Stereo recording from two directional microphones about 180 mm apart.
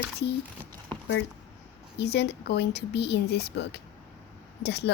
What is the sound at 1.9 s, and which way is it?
Speech, 70° left (ahead or behind).